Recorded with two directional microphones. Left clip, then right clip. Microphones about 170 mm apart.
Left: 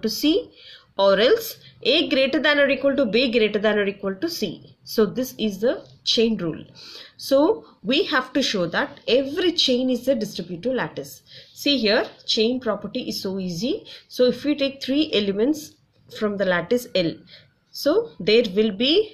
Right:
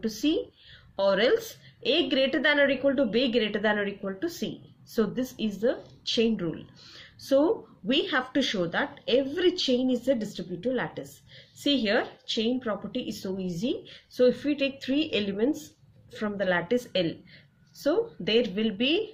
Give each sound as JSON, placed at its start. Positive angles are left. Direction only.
{"t": 0.0, "sound": "a woman's voice", "side_deg": 30}